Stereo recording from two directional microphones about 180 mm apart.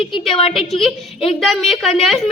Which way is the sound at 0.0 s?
Centre (ahead or behind).